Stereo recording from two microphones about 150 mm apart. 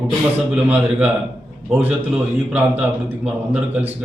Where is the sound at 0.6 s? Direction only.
10° right (ahead or behind).